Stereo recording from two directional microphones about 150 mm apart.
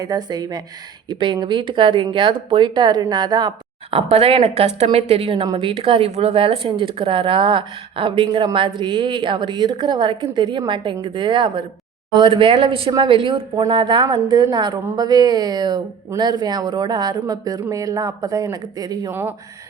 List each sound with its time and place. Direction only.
0.0 s speech: 25° right (ahead or behind)
3.9 s speech: 40° right (ahead or behind); by 19.1 s 25° right (ahead or behind)